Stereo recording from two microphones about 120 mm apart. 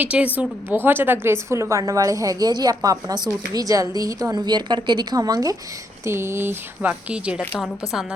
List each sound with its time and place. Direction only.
0.0 s a woman's voice: 10° right (ahead or behind)